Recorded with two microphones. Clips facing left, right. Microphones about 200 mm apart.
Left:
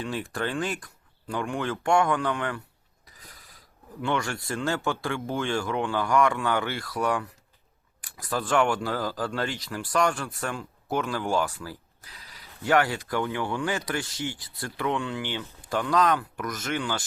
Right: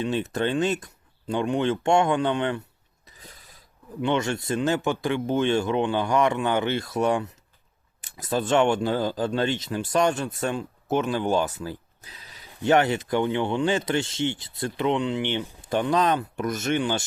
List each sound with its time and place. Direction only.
0.0 s speech: 20° right (ahead or behind)
3.1 s mechanisms: 25° right (ahead or behind)
4.0 s speech: 20° right (ahead or behind)